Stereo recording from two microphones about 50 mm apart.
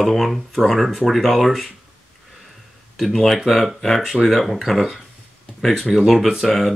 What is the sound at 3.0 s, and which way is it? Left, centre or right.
Speech, centre.